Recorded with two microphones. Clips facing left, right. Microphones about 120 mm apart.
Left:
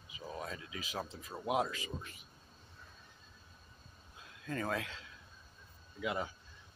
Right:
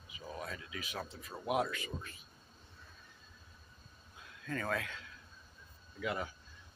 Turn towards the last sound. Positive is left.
turn(degrees=15)  # may be behind; listen again after turning